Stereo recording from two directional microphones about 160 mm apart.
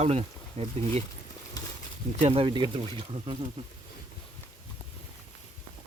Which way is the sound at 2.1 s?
40° right (ahead or behind).